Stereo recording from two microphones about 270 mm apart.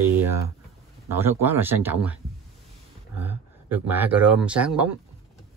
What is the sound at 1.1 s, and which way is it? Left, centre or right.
Speech, centre.